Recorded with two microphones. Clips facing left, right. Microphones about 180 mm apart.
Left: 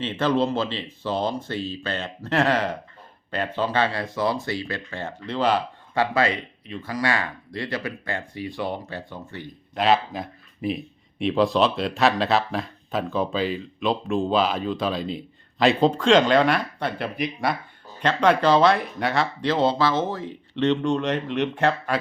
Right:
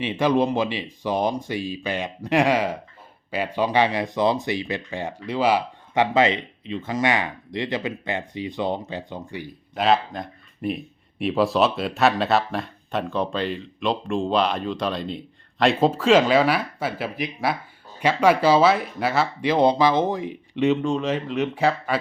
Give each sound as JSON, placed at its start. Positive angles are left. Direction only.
{"t": 0.0, "sound": "speech", "side_deg": -10}
{"t": 9.7, "sound": "speech", "side_deg": 0}